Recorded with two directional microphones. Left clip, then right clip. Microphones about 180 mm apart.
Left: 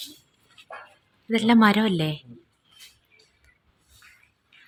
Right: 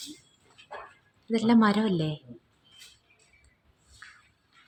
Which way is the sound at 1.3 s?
10° left (ahead or behind).